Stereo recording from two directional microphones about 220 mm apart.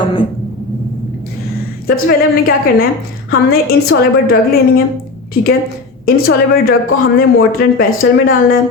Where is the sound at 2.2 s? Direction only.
40° left (ahead or behind).